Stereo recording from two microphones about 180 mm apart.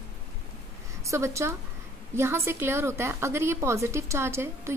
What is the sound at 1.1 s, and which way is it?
A woman's voice, 15° right (ahead or behind).